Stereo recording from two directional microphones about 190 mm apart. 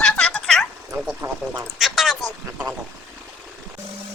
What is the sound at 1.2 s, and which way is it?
Speech, 15° right (ahead or behind).